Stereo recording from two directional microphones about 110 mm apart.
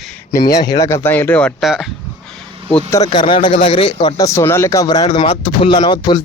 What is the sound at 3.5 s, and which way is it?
Speech, 60° left (ahead or behind).